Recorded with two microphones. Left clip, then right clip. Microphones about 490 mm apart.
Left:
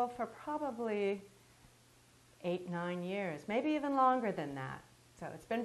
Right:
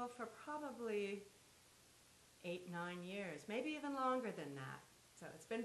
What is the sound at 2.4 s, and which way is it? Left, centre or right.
A woman's voice, left.